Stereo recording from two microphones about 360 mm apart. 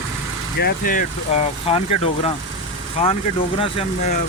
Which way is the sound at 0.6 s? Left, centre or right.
Left.